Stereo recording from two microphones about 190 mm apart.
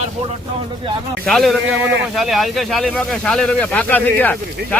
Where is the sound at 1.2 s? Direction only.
Centre (ahead or behind).